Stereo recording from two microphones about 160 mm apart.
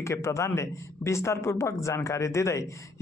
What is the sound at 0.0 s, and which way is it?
Speech, 20° left (ahead or behind).